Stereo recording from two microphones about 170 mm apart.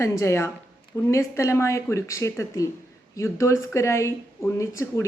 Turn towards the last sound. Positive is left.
turn(degrees=15)  # may be behind; listen again after turning